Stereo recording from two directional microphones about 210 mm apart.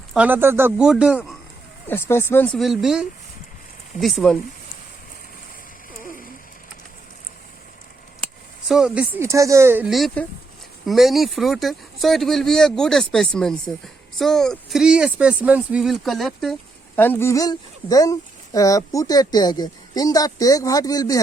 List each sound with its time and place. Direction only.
0.1 s speech: 5° right (ahead or behind)
1.9 s speech: 10° left (ahead or behind)
6.0 s a sound: 40° left (ahead or behind)
8.6 s speech: 5° right (ahead or behind); by 21.2 s 15° left (ahead or behind)